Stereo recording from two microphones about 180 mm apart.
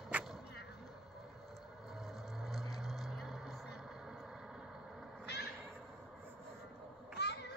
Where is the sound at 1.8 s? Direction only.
Centre (ahead or behind).